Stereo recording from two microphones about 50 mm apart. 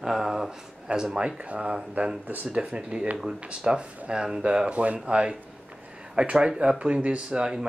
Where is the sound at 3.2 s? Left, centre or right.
Centre.